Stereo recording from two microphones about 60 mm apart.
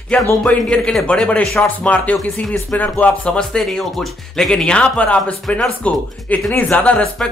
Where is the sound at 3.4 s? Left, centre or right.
Centre.